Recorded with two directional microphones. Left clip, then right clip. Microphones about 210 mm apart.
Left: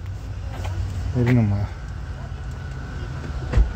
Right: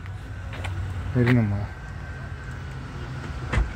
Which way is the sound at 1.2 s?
Centre (ahead or behind).